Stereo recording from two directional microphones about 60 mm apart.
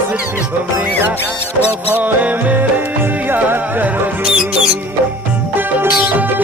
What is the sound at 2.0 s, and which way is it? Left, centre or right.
Music, right.